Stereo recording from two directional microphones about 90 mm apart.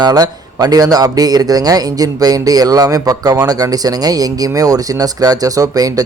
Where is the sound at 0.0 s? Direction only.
50° right (ahead or behind).